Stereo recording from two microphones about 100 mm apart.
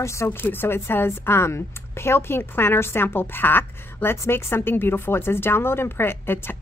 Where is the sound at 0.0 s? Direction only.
30° left (ahead or behind).